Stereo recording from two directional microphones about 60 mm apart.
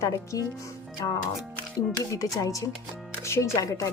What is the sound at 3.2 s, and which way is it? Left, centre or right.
Speech, left.